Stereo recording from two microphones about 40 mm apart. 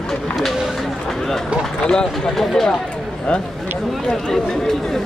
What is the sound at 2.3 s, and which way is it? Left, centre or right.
Speech, centre.